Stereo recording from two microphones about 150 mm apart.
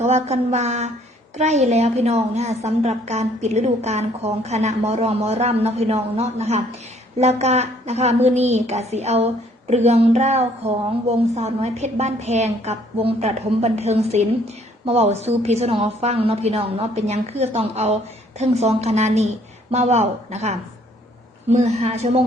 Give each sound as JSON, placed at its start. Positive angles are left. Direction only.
{"t": 0.0, "sound": "a woman's voice", "side_deg": -45}